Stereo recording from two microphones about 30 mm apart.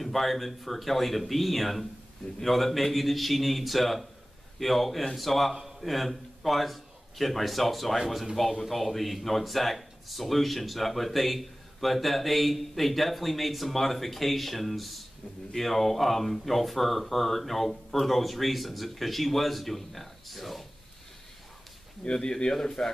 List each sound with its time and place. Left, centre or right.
0.0 s a man's voice: centre
22.0 s speech: left
22.5 s speech: centre